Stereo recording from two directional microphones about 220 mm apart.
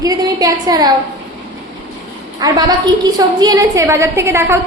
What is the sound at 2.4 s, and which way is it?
A woman's voice, 15° right (ahead or behind).